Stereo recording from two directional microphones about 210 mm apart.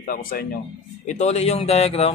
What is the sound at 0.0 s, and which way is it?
Speech, 40° left (ahead or behind).